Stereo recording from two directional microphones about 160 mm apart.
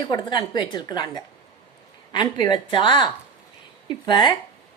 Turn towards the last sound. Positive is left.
turn(degrees=30)  # may be behind; listen again after turning